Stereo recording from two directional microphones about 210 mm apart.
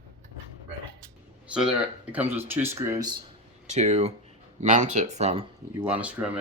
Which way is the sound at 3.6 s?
35° right (ahead or behind).